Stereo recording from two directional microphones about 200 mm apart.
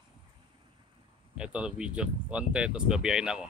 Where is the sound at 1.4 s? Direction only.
5° right (ahead or behind).